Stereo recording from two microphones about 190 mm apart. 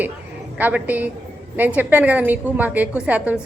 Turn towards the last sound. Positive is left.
turn(degrees=-10)  # may be behind; listen again after turning